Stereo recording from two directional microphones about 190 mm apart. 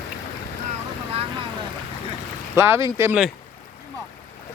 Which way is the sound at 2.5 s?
15° right (ahead or behind).